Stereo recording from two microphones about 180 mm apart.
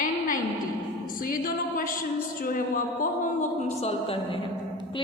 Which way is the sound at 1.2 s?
50° left (ahead or behind).